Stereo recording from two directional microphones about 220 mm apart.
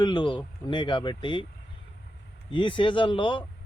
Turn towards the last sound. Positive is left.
turn(degrees=20)  # may be behind; listen again after turning